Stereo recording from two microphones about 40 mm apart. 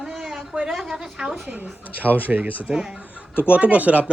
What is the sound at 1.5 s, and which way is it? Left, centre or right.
Speech, right.